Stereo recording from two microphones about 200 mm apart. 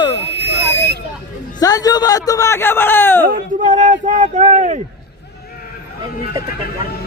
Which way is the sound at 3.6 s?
35° right (ahead or behind).